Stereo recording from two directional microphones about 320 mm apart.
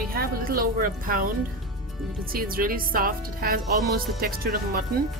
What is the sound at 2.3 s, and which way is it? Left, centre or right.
Speech, right.